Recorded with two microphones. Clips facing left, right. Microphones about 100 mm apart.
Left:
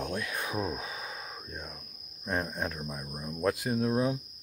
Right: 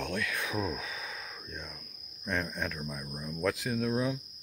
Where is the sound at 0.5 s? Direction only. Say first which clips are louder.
Even; 20° left (ahead or behind).